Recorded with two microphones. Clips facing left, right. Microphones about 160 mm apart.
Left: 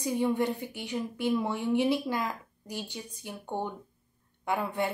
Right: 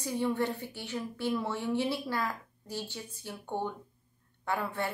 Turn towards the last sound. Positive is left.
turn(degrees=15)  # may be behind; listen again after turning